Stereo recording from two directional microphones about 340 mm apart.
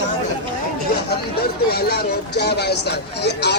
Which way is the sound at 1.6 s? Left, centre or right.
Left.